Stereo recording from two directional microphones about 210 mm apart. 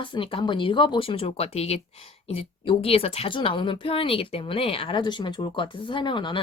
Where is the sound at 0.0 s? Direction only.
25° left (ahead or behind).